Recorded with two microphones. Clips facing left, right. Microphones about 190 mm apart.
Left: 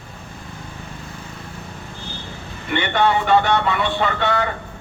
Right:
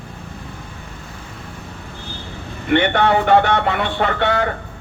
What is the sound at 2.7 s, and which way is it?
A man's voice, 60° right (ahead or behind).